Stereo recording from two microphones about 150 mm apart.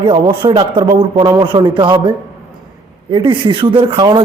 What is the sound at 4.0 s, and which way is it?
Speech, 25° right (ahead or behind).